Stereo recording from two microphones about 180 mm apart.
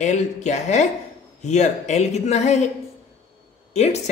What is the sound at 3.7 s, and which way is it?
Speech, 35° left (ahead or behind).